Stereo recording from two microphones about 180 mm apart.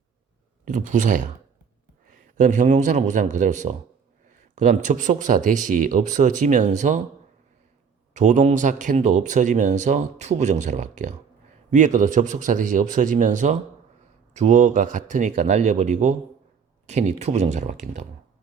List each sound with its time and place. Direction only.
0.6 s a man's voice: 45° right (ahead or behind)
8.1 s speech: 45° right (ahead or behind)